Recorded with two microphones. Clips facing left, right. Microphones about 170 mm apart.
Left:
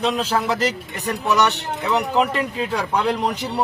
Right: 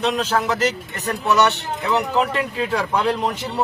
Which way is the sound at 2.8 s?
15° left (ahead or behind).